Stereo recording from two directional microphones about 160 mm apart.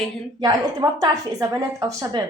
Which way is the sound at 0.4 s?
25° right (ahead or behind).